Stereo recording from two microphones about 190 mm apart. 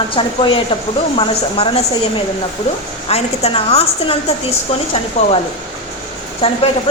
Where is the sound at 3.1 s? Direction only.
35° left (ahead or behind).